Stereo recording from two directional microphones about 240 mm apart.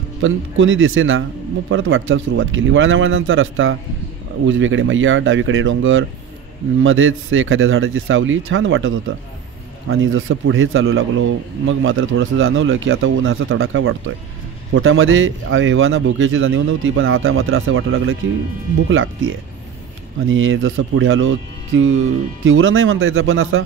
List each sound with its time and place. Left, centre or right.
0.2 s a man's voice: right